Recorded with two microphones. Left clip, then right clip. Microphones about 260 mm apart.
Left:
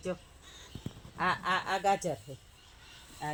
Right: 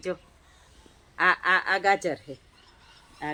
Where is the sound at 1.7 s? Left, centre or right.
Left.